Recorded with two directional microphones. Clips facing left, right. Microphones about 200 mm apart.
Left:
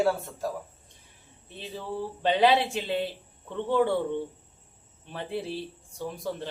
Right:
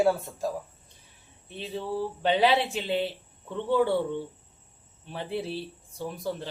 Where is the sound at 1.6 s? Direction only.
Centre (ahead or behind).